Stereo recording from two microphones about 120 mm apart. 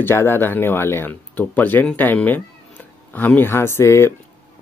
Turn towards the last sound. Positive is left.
turn(degrees=25)  # may be behind; listen again after turning